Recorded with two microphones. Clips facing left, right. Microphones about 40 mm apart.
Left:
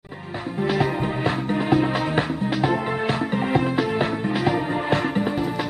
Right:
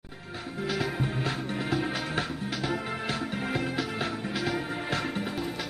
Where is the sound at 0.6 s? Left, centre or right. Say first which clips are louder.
Left 8 dB; left.